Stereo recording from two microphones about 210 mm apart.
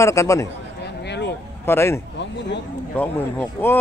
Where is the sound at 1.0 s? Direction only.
55° left (ahead or behind).